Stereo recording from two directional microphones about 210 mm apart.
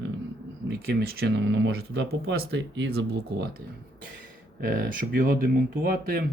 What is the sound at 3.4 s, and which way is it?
Speech, 45° right (ahead or behind).